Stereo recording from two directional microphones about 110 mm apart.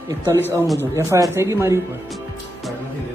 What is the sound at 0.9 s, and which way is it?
Speech, 25° right (ahead or behind).